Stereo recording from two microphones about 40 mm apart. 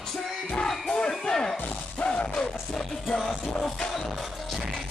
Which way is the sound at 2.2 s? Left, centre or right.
Left.